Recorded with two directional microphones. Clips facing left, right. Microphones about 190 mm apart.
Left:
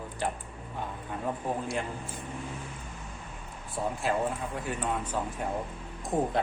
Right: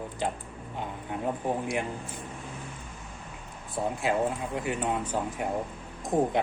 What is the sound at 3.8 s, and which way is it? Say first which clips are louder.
Speech: right 2 dB; 20° right (ahead or behind).